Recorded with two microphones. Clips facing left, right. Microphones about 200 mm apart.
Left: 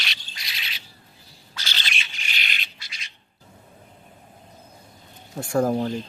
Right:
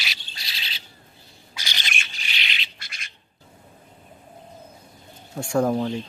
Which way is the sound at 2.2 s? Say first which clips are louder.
Even; 45° left (ahead or behind).